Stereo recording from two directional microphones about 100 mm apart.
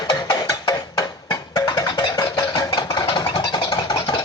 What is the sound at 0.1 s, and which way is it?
Music, 35° left (ahead or behind).